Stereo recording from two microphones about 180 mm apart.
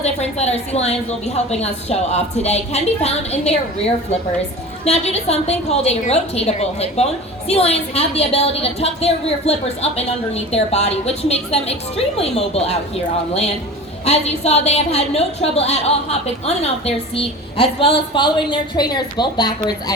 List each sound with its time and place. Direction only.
0.0 s a woman's voice: 35° left (ahead or behind)
4.9 s a woman's voice: 35° left (ahead or behind)
14.0 s a woman's voice: 35° left (ahead or behind)